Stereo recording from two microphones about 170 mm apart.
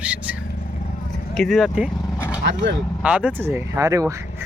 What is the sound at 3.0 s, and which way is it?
Speech, 5° right (ahead or behind).